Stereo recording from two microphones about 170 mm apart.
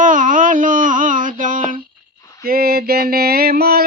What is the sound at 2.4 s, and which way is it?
Mantra, 65° right (ahead or behind).